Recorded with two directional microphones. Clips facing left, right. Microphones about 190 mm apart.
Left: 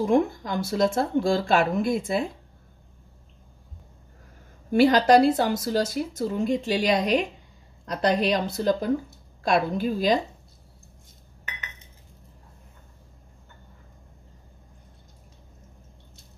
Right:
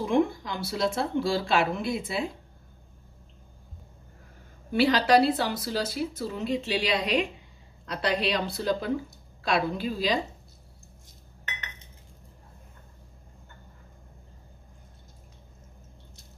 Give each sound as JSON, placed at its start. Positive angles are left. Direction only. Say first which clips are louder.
{"t": 0.0, "sound": "speech", "louder": "left 3 dB", "side_deg": 45}
{"t": 4.7, "sound": "speech", "louder": "left 4 dB", "side_deg": 45}